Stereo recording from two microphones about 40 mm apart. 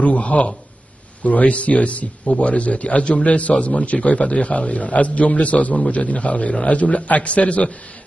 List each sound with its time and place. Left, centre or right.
0.0 s a man's voice: left